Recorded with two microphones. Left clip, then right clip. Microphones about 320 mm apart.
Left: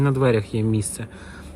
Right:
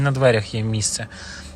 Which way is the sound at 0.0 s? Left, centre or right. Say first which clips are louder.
Right 3 dB; centre.